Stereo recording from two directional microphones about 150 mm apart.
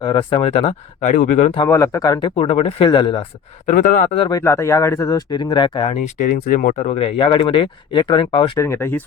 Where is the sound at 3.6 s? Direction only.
60° left (ahead or behind).